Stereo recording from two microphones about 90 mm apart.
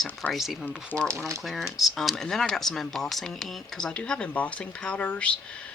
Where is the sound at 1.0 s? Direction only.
35° right (ahead or behind).